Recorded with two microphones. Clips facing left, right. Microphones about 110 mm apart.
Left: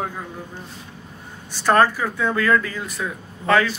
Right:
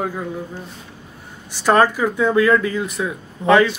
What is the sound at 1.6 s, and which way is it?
Speech, 15° right (ahead or behind).